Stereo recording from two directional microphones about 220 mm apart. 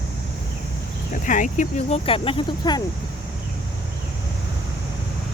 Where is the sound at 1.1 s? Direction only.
35° left (ahead or behind); by 2.8 s 20° left (ahead or behind).